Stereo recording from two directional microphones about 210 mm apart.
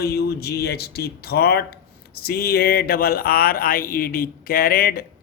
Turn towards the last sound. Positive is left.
turn(degrees=45)  # may be behind; listen again after turning